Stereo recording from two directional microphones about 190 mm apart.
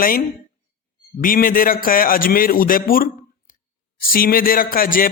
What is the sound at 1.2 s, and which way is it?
A man's voice, 45° left (ahead or behind).